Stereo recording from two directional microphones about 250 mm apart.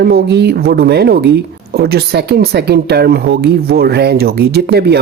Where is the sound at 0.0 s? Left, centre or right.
Right.